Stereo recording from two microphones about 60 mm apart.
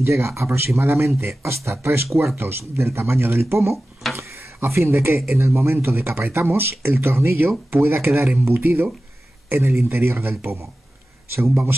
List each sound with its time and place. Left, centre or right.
0.0 s speech: right
3.7 s a sound: centre
4.2 s speech: right